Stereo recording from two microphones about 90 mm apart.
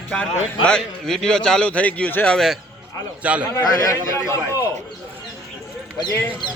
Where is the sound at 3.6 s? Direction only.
45° left (ahead or behind).